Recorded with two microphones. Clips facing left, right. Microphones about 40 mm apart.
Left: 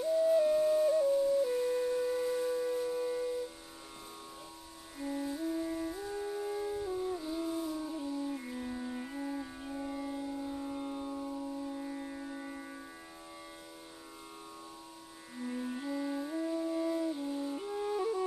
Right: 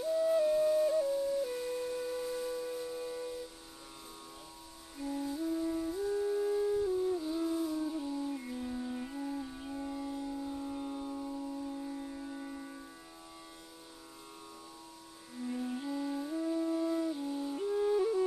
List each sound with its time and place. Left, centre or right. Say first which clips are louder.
0.0 s music: left 2 dB; centre
4.9 s music: even; centre
15.3 s music: right 1 dB; centre